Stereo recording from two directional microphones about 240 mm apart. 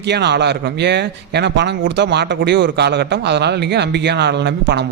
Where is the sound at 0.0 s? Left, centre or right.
Right.